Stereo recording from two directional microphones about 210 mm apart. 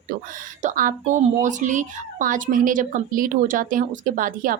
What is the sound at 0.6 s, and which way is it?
Speech, 40° right (ahead or behind).